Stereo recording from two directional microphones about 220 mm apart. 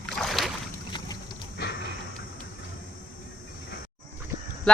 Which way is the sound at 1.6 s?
45° left (ahead or behind).